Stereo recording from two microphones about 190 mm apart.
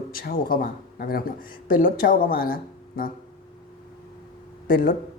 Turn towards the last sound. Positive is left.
turn(degrees=50)  # may be behind; listen again after turning